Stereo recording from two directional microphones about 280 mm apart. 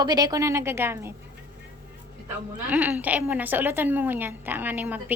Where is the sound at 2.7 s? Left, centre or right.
Centre.